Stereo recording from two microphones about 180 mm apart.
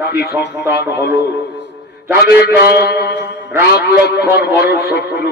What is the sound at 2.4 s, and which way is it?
Speech, 65° left (ahead or behind).